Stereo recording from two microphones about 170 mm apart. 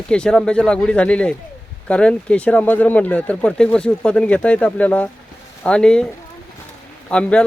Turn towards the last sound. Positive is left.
turn(degrees=5)  # may be behind; listen again after turning